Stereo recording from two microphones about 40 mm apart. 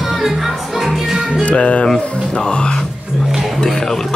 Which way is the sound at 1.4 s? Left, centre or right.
Left.